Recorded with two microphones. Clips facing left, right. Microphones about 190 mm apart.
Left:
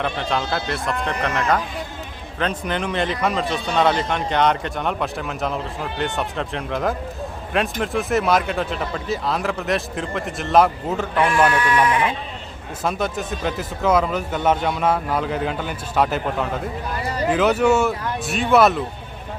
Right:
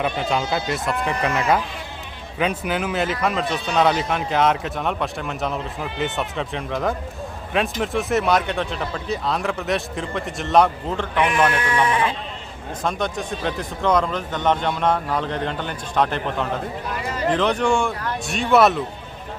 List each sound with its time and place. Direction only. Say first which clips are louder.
0.0 s speech: right 1 dB; 5° right (ahead or behind)
11.2 s speech: left 2 dB; 20° right (ahead or behind)
12.8 s speech: left 1 dB; 5° left (ahead or behind)